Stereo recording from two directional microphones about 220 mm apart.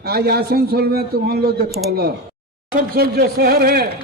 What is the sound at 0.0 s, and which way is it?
A man's voice, 45° right (ahead or behind).